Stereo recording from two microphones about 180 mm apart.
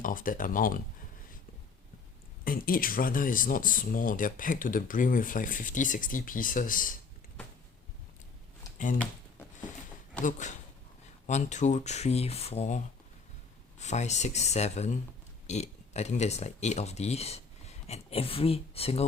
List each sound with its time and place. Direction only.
0.0 s speech: 50° left (ahead or behind)
2.4 s speech: 50° left (ahead or behind)
10.2 s speech: 45° left (ahead or behind)